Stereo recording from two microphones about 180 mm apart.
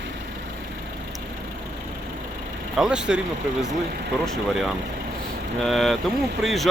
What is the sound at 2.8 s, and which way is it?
Speech, 5° right (ahead or behind).